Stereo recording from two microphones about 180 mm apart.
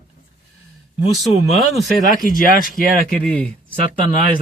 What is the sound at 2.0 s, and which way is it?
Speech, 50° left (ahead or behind).